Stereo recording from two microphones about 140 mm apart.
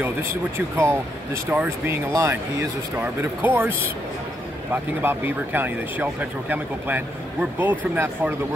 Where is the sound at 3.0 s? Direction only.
15° right (ahead or behind).